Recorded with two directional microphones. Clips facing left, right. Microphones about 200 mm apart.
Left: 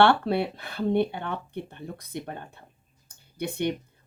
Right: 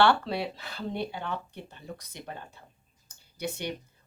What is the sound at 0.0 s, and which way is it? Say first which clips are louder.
Speech: left 4 dB; 55° left (ahead or behind).